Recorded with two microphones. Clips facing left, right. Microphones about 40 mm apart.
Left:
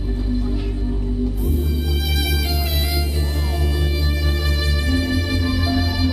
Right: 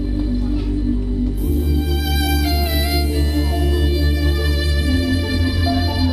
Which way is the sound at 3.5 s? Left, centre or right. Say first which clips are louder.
Right 4 dB; centre.